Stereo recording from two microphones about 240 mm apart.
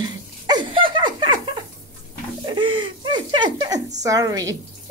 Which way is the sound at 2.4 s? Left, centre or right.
Right.